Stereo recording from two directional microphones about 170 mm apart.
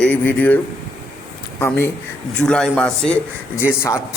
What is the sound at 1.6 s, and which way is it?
A man's voice, 15° left (ahead or behind).